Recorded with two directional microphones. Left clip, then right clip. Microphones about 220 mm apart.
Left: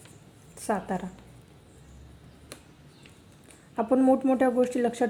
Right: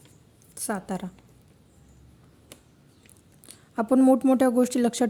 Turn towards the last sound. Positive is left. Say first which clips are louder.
# right 1 dB
turn(degrees=-45)  # may be behind; listen again after turning